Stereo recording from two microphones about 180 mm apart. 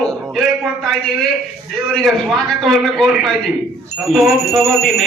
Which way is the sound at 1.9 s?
Centre (ahead or behind).